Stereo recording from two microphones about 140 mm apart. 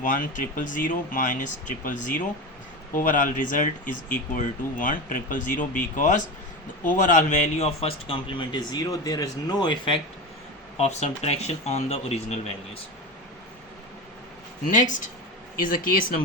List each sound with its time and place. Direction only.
0.0 s a man's voice: 70° left (ahead or behind); by 10.0 s 35° left (ahead or behind)
10.8 s speech: 50° left (ahead or behind)
14.7 s speech: 65° left (ahead or behind)
15.5 s speech: 80° left